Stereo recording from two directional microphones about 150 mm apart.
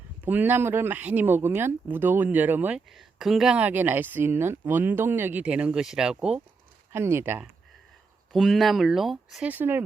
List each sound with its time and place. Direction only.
0.2 s speech: 10° right (ahead or behind)
6.9 s speech: 15° right (ahead or behind)
8.3 s speech: centre (ahead or behind)